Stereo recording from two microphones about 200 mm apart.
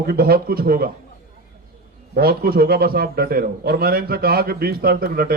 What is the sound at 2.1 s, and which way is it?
A man's voice, 50° right (ahead or behind).